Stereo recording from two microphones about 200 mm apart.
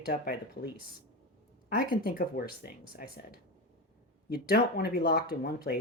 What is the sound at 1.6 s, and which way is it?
Speech, 50° left (ahead or behind).